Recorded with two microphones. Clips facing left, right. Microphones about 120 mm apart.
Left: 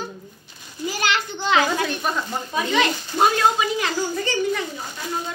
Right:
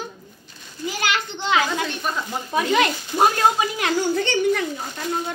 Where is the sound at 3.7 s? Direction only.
65° right (ahead or behind).